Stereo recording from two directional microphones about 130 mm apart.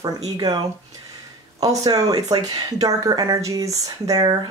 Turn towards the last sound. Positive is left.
turn(degrees=-30)  # may be behind; listen again after turning